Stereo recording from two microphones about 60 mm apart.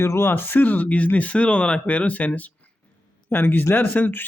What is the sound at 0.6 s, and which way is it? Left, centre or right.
Speech, left.